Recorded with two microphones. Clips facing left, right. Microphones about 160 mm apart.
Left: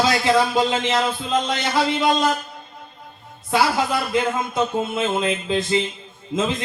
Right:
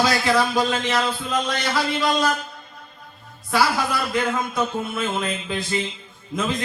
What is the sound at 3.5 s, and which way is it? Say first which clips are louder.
Music: left 2 dB; 20° left (ahead or behind).